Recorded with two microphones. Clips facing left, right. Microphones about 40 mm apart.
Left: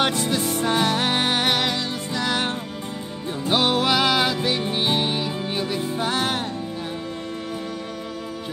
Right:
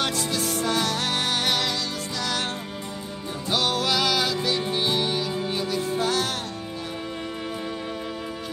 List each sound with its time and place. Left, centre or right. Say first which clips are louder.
0.0 s music: left 4 dB; left